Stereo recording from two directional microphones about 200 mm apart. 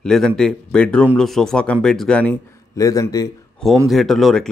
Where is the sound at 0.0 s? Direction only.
5° left (ahead or behind).